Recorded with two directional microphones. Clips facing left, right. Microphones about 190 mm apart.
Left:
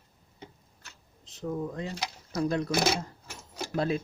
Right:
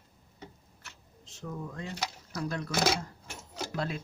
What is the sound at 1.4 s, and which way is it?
Speech, 20° left (ahead or behind).